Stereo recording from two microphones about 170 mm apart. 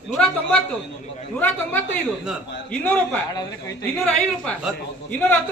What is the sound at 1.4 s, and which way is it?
A man's voice, 10° left (ahead or behind).